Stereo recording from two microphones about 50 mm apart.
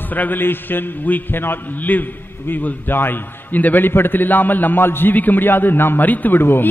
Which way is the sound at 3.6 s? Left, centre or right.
Left.